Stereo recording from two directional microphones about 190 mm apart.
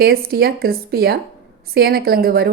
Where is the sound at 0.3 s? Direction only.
55° right (ahead or behind).